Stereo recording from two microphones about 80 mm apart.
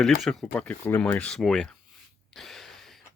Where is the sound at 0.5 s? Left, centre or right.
Centre.